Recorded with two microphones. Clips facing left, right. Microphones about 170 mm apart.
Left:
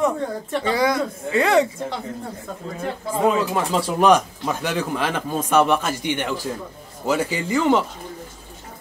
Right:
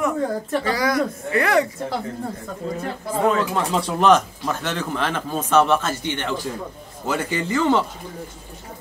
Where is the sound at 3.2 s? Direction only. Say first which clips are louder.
Left 1 dB; 10° left (ahead or behind).